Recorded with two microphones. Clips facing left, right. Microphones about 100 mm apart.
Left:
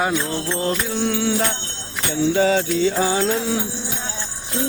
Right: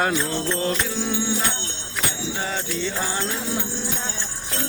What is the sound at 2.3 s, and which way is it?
Music, 90° left.